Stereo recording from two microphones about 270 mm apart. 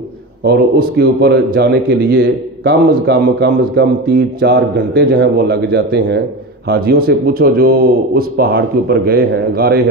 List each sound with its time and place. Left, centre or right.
0.4 s speech: right